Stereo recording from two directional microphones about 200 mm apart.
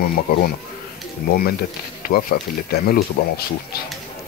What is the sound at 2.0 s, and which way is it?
Speech, 50° left (ahead or behind).